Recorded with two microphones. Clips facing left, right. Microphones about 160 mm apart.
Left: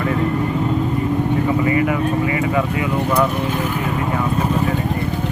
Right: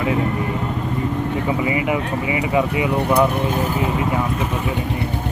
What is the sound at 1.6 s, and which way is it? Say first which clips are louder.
Speech: left 3 dB; 15° right (ahead or behind).